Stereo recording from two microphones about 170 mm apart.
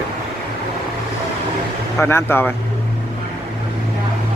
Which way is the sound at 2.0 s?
15° left (ahead or behind).